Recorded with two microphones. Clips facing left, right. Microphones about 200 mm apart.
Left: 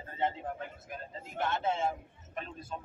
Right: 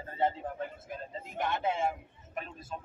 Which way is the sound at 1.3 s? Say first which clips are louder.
Even; 15° right (ahead or behind).